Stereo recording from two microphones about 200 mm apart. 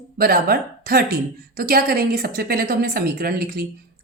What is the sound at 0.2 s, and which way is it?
A woman's voice, 50° right (ahead or behind).